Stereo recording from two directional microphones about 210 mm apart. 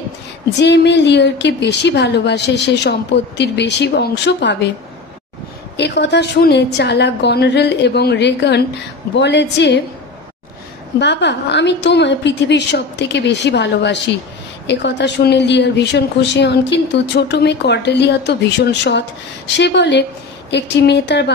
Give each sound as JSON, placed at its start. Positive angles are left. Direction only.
{"t": 0.6, "sound": "a woman's voice", "side_deg": 55}
{"t": 5.8, "sound": "a woman's voice", "side_deg": 55}
{"t": 11.0, "sound": "a woman's voice", "side_deg": 55}